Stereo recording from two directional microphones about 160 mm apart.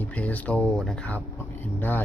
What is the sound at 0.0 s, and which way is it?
A man's voice, 10° left (ahead or behind).